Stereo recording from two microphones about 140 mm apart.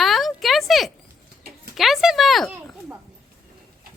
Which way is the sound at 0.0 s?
Centre (ahead or behind).